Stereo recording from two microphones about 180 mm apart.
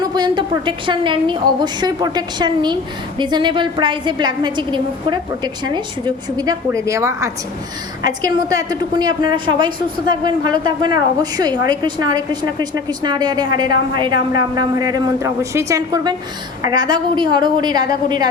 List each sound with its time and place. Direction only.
0.0 s a woman's voice: 25° right (ahead or behind)